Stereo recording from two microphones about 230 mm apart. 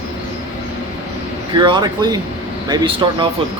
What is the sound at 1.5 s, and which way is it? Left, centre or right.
Speech, centre.